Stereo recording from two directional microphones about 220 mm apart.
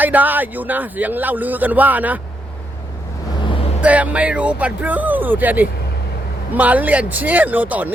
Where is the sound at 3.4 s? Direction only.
25° left (ahead or behind).